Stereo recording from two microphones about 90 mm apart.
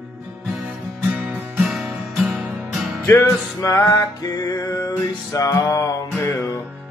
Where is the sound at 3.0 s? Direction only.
30° left (ahead or behind).